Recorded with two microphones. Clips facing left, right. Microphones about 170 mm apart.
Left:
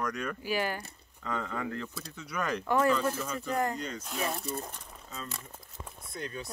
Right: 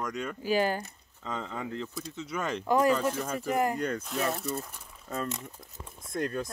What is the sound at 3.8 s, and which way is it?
Speech, 55° right (ahead or behind).